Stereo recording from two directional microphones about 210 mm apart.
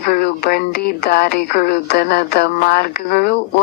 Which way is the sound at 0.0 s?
45° left (ahead or behind).